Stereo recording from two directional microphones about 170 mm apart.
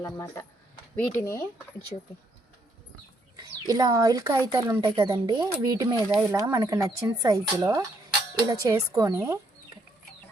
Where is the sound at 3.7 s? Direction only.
20° right (ahead or behind).